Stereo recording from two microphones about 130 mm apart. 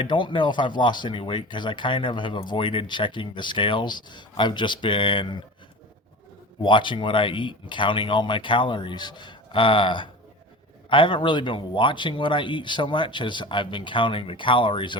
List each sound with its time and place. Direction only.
0.0 s speech: 35° left (ahead or behind)
6.6 s speech: 40° left (ahead or behind)